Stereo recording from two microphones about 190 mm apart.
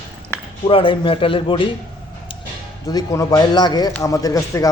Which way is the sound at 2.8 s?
20° left (ahead or behind).